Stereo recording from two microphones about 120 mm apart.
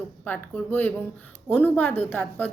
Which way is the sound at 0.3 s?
15° left (ahead or behind).